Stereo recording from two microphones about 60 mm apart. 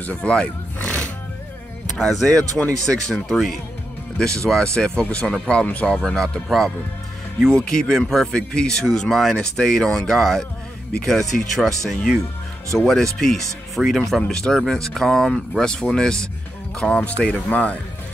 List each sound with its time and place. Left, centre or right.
0.0 s speech: left
0.7 s music: centre
2.0 s speech: centre
4.2 s speech: centre
5.9 s speech: centre